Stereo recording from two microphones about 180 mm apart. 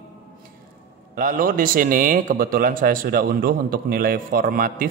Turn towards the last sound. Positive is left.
turn(degrees=-50)  # may be behind; listen again after turning